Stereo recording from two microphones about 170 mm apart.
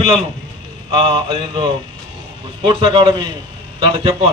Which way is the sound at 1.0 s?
30° right (ahead or behind).